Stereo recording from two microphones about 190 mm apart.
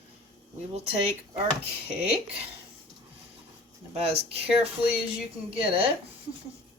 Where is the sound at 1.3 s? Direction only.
30° right (ahead or behind).